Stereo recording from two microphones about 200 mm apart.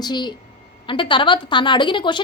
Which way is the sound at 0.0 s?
20° left (ahead or behind).